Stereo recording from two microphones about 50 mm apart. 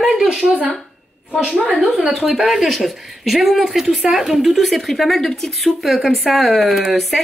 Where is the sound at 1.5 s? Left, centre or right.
Right.